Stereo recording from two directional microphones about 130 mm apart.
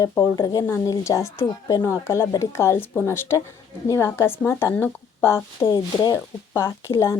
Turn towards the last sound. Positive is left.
turn(degrees=20)  # may be behind; listen again after turning